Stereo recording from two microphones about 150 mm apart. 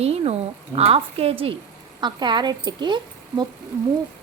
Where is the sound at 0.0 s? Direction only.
45° right (ahead or behind).